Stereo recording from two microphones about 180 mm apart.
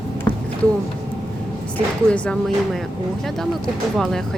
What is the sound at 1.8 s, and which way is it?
Speech, 5° left (ahead or behind).